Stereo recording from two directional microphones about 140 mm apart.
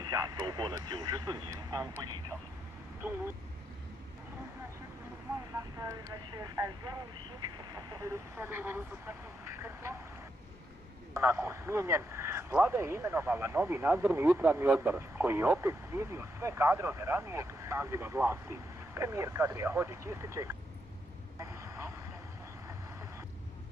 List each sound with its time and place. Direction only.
0.0 s speech: 30° right (ahead or behind)
5.8 s speech: 20° right (ahead or behind)
7.5 s a sound: 30° right (ahead or behind)
8.4 s speech: 15° right (ahead or behind)
11.1 s speech: 20° right (ahead or behind)
21.4 s vehicle: 20° right (ahead or behind)